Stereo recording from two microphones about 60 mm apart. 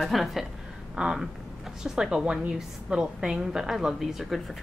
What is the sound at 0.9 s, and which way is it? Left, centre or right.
A woman's voice, centre.